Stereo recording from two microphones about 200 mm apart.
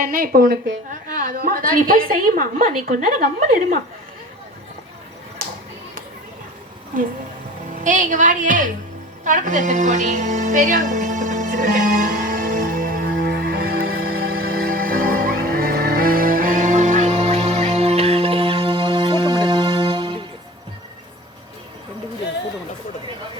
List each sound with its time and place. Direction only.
0.0 s a woman's voice: 45° right (ahead or behind)
7.9 s a woman's voice: 40° right (ahead or behind)
9.2 s music: 40° right (ahead or behind); by 20.2 s 25° right (ahead or behind)